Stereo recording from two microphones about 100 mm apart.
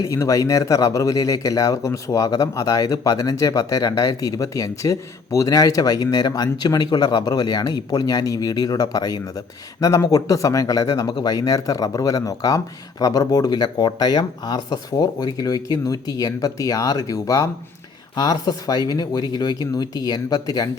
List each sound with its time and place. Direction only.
0.0 s speech: 30° left (ahead or behind)